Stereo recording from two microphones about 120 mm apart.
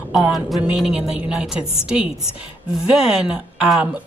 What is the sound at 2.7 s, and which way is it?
A woman's voice, 5° right (ahead or behind).